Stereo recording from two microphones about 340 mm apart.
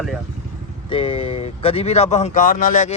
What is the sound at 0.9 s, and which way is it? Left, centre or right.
Speech, centre.